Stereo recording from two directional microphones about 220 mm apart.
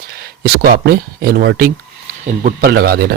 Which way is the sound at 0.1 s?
45° right (ahead or behind).